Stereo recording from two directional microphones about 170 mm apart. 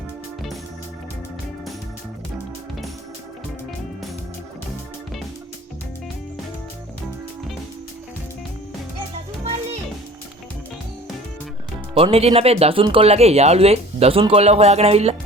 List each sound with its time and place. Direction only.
11.9 s speech: 35° right (ahead or behind)